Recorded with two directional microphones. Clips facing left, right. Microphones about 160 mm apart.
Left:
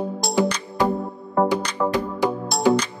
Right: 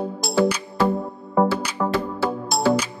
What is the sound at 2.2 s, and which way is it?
Music, 15° left (ahead or behind).